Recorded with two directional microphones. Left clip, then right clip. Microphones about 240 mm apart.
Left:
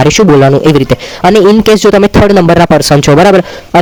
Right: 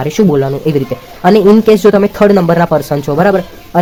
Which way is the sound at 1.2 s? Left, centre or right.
Left.